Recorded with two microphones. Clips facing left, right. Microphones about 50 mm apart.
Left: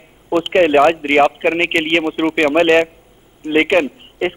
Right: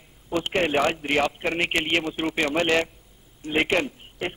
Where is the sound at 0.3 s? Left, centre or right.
Left.